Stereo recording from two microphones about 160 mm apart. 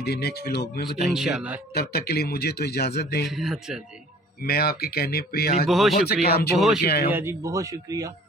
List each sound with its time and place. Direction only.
0.0 s speech: 90° left
1.1 s speech: 5° right (ahead or behind)
1.7 s speech: 85° left
3.3 s speech: centre (ahead or behind)
4.4 s speech: 75° left (ahead or behind)
5.7 s speech: centre (ahead or behind)
6.2 s speech: 80° left
7.1 s a man's voice: 15° right (ahead or behind)